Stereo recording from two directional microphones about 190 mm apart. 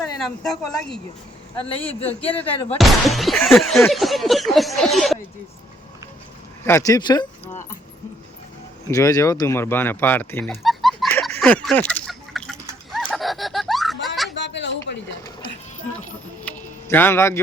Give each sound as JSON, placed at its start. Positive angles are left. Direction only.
{"t": 0.4, "sound": "speech", "side_deg": 5}
{"t": 1.9, "sound": "speech", "side_deg": 30}
{"t": 2.7, "sound": "speech", "side_deg": 0}
{"t": 6.7, "sound": "speech", "side_deg": 15}
{"t": 8.9, "sound": "speech", "side_deg": 20}
{"t": 10.6, "sound": "music", "side_deg": 0}
{"t": 11.3, "sound": "a sound", "side_deg": 5}
{"t": 14.3, "sound": "a sound", "side_deg": 70}
{"t": 16.4, "sound": "a sound", "side_deg": 10}